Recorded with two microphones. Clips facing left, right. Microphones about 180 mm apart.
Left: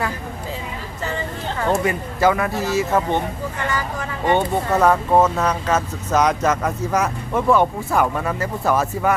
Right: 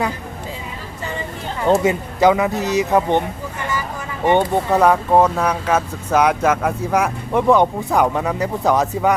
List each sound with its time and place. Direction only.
1.6 s speech: 20° right (ahead or behind)
4.3 s speech: 15° right (ahead or behind)